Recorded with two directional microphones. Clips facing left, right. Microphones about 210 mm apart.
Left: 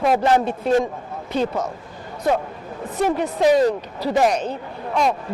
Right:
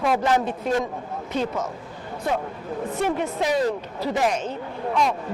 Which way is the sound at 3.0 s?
35° left (ahead or behind).